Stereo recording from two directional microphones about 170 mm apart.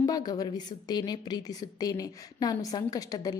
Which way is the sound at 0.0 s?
20° left (ahead or behind).